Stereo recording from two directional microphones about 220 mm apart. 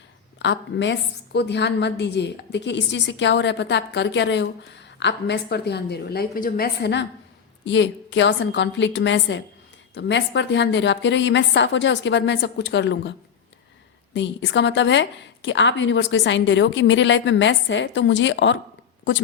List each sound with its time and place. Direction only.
0.3 s a woman's voice: 55° left (ahead or behind)